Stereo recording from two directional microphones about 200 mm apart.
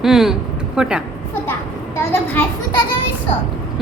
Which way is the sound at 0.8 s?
5° right (ahead or behind).